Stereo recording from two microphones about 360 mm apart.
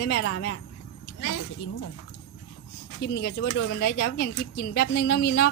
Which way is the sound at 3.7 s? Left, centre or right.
Left.